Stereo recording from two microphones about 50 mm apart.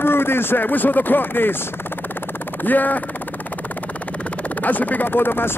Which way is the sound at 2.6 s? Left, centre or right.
Left.